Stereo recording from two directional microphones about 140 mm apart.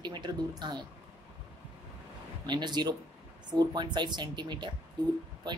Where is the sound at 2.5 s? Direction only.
30° right (ahead or behind).